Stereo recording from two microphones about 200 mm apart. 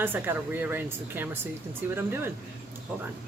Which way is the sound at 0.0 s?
10° right (ahead or behind).